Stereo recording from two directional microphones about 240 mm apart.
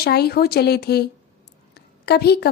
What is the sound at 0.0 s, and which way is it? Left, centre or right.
A woman's voice, left.